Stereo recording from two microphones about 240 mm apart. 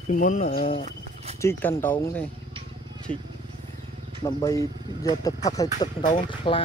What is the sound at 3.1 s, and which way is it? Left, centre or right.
Speech, right.